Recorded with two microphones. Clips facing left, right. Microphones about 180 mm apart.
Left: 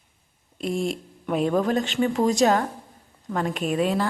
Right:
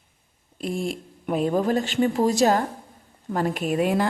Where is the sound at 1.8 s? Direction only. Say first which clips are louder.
Right 2 dB; 50° right (ahead or behind).